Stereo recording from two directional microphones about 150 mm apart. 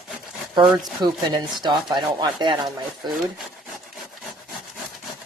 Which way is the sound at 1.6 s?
30° right (ahead or behind).